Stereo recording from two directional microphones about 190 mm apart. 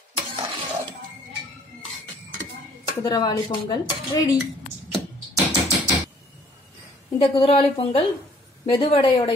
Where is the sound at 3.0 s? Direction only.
20° left (ahead or behind).